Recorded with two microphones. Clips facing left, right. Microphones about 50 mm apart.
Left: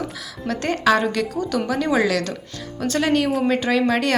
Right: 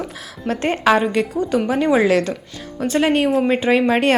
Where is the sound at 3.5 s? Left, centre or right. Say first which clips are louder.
Right 3 dB; right.